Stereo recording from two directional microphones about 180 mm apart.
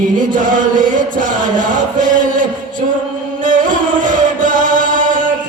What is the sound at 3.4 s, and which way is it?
Music, 45° right (ahead or behind).